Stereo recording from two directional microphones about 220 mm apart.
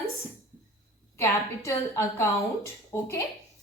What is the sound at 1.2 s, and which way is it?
A woman's voice, 15° left (ahead or behind).